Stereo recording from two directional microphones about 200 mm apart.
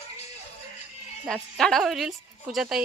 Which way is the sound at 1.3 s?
Centre (ahead or behind).